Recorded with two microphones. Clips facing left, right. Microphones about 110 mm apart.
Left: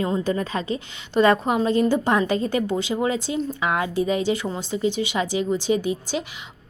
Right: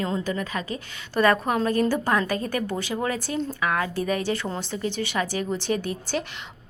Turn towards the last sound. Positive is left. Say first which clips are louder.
# left 3 dB
turn(degrees=15)  # may be behind; listen again after turning